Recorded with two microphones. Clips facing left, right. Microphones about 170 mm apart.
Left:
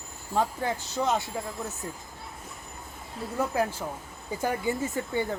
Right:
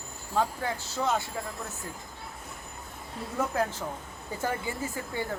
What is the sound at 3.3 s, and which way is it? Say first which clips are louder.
Speech: left 1 dB; 10° left (ahead or behind).